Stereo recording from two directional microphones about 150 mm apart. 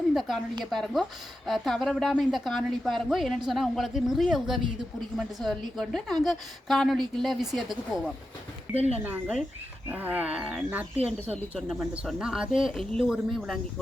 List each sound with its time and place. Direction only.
0.1 s a woman's voice: centre (ahead or behind)
8.7 s speech: 45° right (ahead or behind)
9.0 s wild animals: 10° right (ahead or behind)
10.3 s a woman's voice: centre (ahead or behind)